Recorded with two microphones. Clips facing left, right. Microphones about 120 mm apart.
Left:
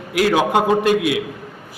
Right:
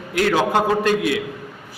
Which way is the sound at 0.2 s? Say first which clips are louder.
Left 2 dB; 15° left (ahead or behind).